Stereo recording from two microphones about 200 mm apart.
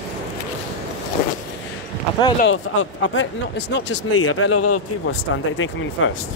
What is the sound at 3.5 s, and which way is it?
Speech, 60° left (ahead or behind).